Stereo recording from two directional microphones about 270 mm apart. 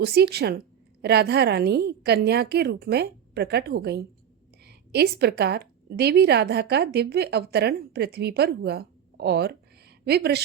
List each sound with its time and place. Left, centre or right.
0.0 s a woman's voice: right